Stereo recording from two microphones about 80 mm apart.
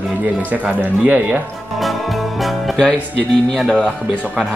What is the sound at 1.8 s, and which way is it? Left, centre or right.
Speech, centre.